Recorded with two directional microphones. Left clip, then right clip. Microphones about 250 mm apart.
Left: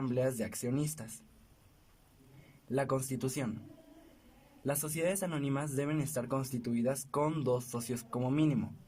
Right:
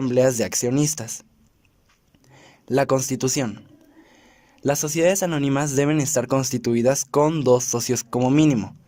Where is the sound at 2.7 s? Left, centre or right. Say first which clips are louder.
Right 14 dB; right.